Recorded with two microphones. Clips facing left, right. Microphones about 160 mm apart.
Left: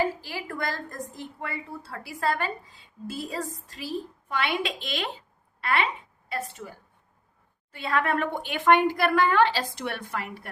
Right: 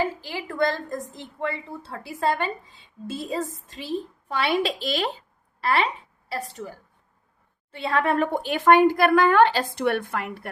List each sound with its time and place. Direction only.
0.0 s a woman's voice: 20° right (ahead or behind); by 6.7 s 35° right (ahead or behind)
7.8 s a woman's voice: 30° right (ahead or behind); by 10.5 s 60° right (ahead or behind)